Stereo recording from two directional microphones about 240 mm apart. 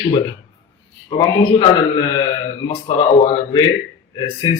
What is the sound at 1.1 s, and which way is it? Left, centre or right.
A man's voice, centre.